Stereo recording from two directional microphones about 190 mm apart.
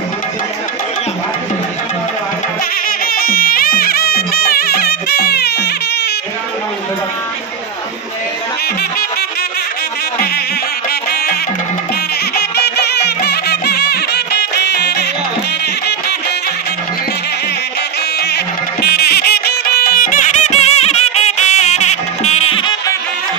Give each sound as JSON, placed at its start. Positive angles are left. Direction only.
{"t": 3.1, "sound": "music", "side_deg": 50}
{"t": 10.9, "sound": "music", "side_deg": 55}
{"t": 12.4, "sound": "music", "side_deg": 60}
{"t": 18.2, "sound": "music", "side_deg": 60}